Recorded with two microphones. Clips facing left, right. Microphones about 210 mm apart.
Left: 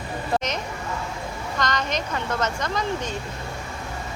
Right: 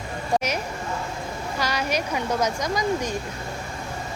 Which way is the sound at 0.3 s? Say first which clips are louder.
Right 2 dB; 10° right (ahead or behind).